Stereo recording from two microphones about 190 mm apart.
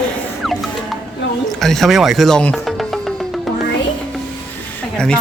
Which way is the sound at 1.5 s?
Centre (ahead or behind).